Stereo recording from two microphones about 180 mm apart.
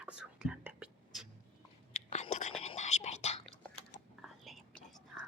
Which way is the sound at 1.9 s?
40° left (ahead or behind).